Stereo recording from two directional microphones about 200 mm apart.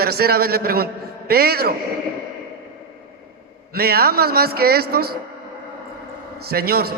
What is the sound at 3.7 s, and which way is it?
A man's voice, 50° right (ahead or behind).